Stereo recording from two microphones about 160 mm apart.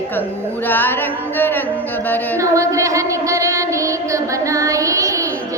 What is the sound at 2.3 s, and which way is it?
Child singing, 20° right (ahead or behind).